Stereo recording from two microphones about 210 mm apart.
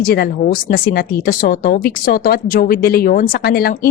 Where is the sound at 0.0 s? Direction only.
45° left (ahead or behind).